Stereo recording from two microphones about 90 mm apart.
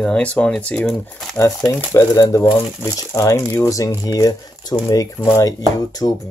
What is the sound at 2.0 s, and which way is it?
Speech, 35° left (ahead or behind).